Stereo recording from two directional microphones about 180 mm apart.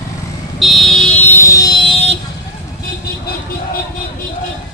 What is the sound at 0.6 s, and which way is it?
Vehicle, centre (ahead or behind).